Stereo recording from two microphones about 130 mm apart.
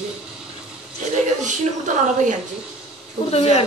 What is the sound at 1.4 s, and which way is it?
Speech, 70° right (ahead or behind).